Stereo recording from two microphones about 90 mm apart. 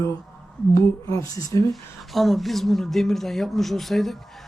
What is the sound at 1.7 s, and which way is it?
A woman's voice, centre (ahead or behind).